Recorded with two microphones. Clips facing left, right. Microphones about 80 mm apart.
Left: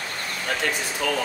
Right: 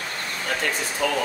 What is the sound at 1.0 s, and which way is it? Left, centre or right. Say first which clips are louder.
Speech: right 2 dB; right.